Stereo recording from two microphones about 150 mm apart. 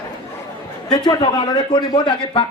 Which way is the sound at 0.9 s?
30° left (ahead or behind).